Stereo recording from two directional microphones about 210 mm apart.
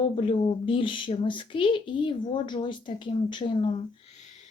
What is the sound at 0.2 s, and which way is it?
Speech, 25° left (ahead or behind).